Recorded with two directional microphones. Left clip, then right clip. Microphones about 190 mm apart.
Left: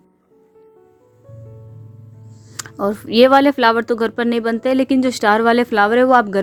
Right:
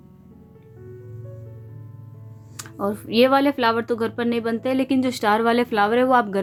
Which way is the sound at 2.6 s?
40° left (ahead or behind).